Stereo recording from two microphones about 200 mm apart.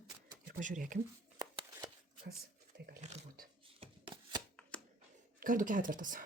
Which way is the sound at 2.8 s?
40° right (ahead or behind).